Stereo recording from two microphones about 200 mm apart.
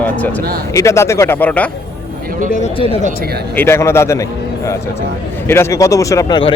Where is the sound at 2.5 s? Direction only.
35° left (ahead or behind).